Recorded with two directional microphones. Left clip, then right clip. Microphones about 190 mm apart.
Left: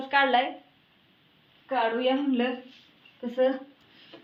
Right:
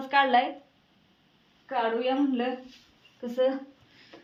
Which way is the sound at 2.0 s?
15° right (ahead or behind).